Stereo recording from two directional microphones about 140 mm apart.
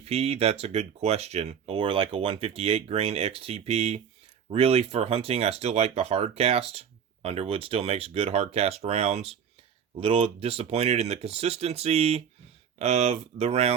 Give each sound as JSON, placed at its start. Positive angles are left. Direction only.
{"t": 0.0, "sound": "speech", "side_deg": -45}
{"t": 1.7, "sound": "speech", "side_deg": -35}